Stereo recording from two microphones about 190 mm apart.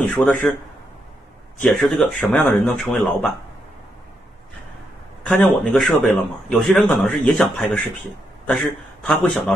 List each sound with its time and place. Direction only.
0.0 s a man's voice: 5° left (ahead or behind)
1.6 s a man's voice: 5° left (ahead or behind)
5.2 s a man's voice: 5° left (ahead or behind)
9.0 s a man's voice: 5° left (ahead or behind)